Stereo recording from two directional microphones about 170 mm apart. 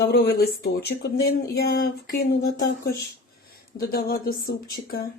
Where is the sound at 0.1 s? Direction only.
65° left (ahead or behind).